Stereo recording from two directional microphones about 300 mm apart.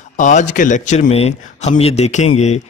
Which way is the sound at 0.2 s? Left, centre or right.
Left.